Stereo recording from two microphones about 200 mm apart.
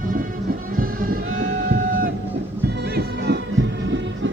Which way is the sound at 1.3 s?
40° right (ahead or behind).